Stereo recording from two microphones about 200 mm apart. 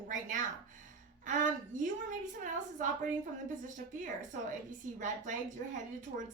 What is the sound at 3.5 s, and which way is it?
A woman's voice, 40° right (ahead or behind).